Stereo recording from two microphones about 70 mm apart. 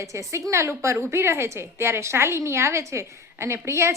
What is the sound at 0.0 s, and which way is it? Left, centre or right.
A woman's voice, right.